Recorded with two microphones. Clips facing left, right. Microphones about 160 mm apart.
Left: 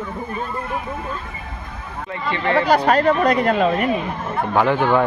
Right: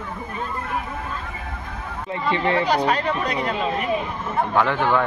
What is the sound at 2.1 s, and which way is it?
Speech, 25° right (ahead or behind).